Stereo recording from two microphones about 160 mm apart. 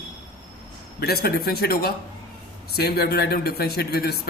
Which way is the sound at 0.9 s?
75° left (ahead or behind).